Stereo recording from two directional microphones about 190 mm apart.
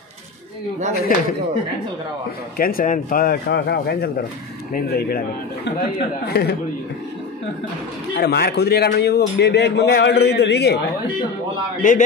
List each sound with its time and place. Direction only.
0.9 s a man's voice: 50° left (ahead or behind)
2.5 s a man's voice: 50° left (ahead or behind)
8.2 s a man's voice: 55° left (ahead or behind)